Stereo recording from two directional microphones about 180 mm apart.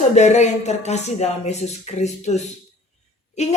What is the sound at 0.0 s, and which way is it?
A woman's voice, 40° left (ahead or behind).